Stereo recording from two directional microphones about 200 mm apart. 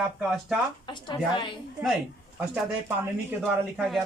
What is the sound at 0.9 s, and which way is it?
Speech, 25° left (ahead or behind).